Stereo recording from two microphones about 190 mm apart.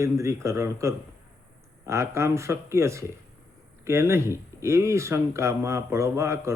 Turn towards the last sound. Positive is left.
turn(degrees=-15)  # may be behind; listen again after turning